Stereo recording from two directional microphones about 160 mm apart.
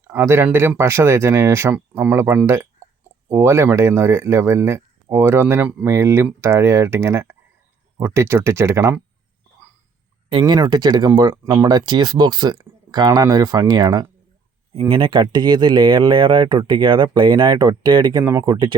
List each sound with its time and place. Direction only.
0.1 s speech: 15° right (ahead or behind)
10.2 s speech: 30° right (ahead or behind)